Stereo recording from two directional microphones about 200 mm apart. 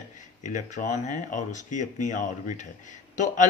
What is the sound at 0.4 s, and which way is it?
A man's voice, 40° left (ahead or behind).